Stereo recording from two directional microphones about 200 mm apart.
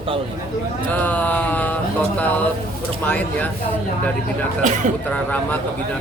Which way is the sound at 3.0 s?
10° left (ahead or behind).